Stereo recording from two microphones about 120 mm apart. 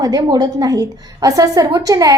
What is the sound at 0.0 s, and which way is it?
A woman's voice, 35° right (ahead or behind).